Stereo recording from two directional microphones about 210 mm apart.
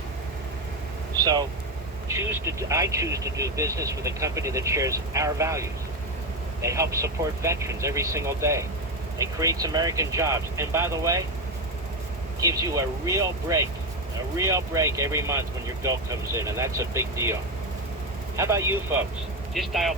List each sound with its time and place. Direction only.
1.2 s speech: 20° right (ahead or behind)
12.4 s speech: 15° right (ahead or behind)
18.3 s speech: 15° right (ahead or behind)
19.5 s speech: centre (ahead or behind)